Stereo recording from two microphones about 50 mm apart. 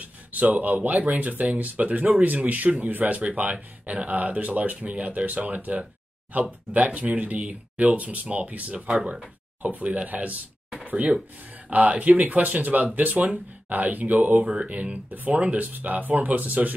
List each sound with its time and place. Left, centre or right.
0.0 s speech: right
9.6 s speech: right
11.7 s speech: right